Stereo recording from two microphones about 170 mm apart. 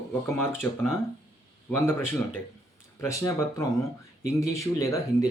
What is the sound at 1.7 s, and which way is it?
Speech, 15° left (ahead or behind).